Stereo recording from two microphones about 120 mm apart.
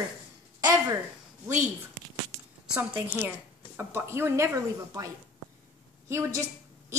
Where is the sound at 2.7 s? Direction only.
15° right (ahead or behind).